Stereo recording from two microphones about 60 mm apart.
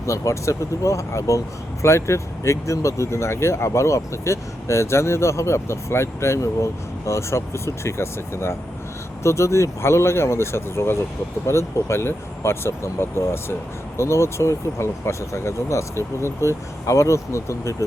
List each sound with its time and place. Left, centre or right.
0.0 s speech: left